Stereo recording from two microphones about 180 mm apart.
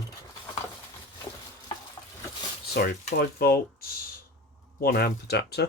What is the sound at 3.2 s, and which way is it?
Speech, 60° left (ahead or behind).